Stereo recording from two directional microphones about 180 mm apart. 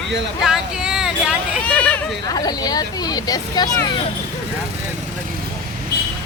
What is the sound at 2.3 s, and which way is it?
Speech, 20° left (ahead or behind).